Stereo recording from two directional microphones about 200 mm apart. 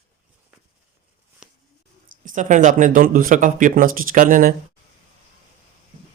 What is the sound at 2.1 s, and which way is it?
Speech, 40° right (ahead or behind).